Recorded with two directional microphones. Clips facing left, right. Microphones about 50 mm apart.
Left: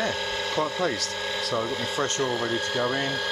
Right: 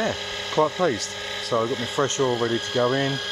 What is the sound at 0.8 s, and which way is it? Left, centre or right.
Speech, right.